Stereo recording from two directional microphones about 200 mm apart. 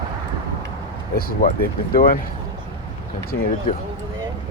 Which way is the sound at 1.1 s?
45° left (ahead or behind).